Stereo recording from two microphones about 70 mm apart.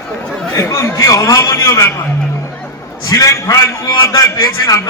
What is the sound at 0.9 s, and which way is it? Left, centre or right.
Speech, left.